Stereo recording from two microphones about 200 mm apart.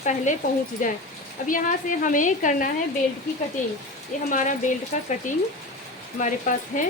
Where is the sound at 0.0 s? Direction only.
35° left (ahead or behind).